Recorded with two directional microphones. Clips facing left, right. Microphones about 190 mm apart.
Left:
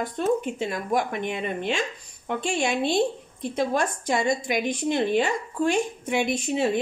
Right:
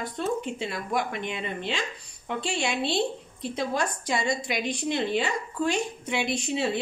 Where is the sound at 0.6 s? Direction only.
45° left (ahead or behind).